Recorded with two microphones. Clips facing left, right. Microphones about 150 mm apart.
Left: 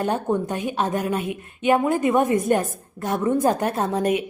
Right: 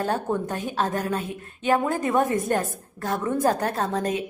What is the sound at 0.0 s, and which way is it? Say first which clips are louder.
A woman's voice: left 3 dB; 20° left (ahead or behind).